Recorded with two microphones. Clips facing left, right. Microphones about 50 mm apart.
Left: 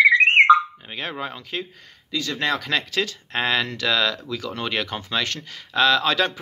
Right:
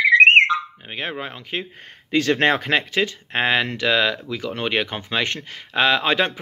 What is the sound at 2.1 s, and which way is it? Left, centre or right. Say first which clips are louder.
Speech: right 7 dB; right.